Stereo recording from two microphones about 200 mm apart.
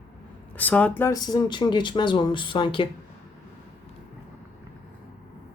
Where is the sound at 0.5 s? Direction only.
5° left (ahead or behind); by 2.8 s 25° left (ahead or behind).